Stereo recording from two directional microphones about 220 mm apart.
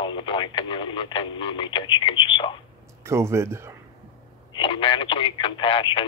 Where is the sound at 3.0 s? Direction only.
10° right (ahead or behind).